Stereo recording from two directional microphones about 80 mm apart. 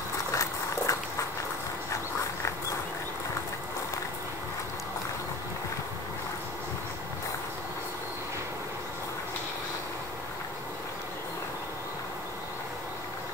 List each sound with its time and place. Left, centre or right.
0.3 s horse: left